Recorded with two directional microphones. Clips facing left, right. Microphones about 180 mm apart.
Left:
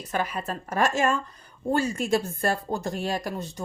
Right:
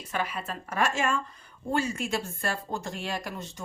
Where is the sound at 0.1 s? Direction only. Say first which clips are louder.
Left 3 dB; 40° left (ahead or behind).